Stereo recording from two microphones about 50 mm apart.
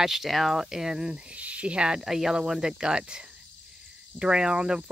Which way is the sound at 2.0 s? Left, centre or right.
Centre.